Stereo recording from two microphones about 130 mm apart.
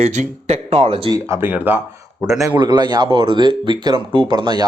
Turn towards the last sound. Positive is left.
turn(degrees=-35)  # may be behind; listen again after turning